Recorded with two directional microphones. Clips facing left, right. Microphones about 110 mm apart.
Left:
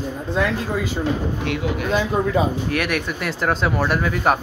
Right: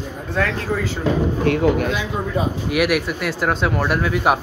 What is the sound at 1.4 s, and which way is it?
Speech, 45° right (ahead or behind).